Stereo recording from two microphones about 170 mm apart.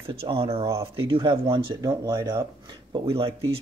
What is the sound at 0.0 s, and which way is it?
Speech, 35° right (ahead or behind).